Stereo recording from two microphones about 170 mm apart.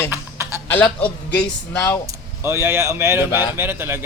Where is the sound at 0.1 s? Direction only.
15° right (ahead or behind).